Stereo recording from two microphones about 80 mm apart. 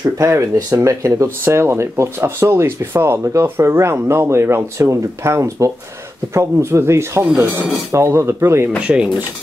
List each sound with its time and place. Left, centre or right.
0.2 s speech: right
8.8 s speech: centre